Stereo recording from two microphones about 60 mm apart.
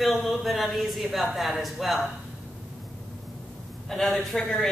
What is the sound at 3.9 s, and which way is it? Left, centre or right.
Speech, centre.